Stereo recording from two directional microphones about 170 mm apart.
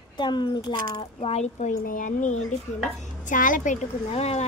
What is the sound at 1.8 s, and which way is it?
A child's voice, 55° left (ahead or behind).